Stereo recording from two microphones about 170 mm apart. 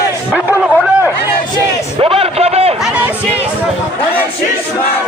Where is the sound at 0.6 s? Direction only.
5° right (ahead or behind).